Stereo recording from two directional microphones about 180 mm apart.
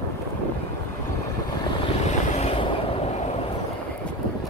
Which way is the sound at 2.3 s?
35° left (ahead or behind).